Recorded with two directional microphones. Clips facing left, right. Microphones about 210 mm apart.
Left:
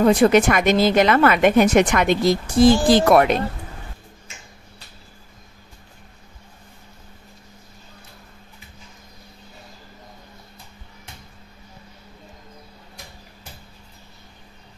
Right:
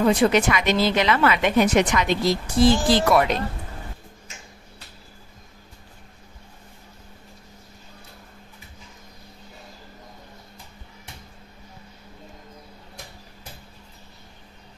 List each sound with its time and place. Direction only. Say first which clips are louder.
0.0 s speech: left 4 dB; 50° left (ahead or behind)